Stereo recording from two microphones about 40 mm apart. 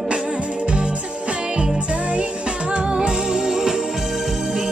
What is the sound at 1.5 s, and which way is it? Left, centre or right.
Music, right.